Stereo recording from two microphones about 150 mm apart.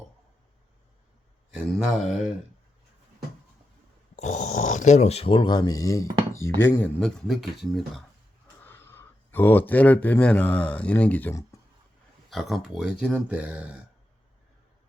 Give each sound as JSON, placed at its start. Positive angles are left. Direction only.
{"t": 1.7, "sound": "speech", "side_deg": 0}
{"t": 4.1, "sound": "speech", "side_deg": 50}
{"t": 8.6, "sound": "speech", "side_deg": 15}
{"t": 12.3, "sound": "speech", "side_deg": 0}